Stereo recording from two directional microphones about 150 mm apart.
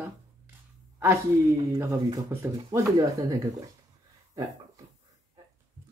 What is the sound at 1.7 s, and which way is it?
Speech, 25° right (ahead or behind).